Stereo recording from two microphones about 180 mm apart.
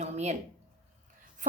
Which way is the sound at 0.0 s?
40° right (ahead or behind).